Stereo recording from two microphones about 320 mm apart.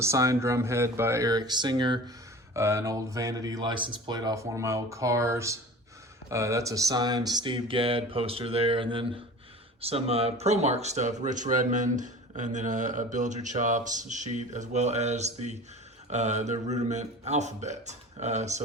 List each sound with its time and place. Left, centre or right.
0.0 s speech: centre